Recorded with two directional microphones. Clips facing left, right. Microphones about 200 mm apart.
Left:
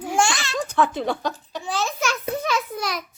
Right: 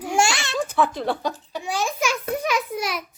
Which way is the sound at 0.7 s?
5° right (ahead or behind).